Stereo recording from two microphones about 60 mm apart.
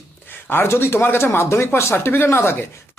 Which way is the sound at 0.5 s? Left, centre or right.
Left.